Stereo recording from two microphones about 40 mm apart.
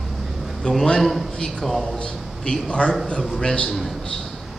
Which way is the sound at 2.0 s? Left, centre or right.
Left.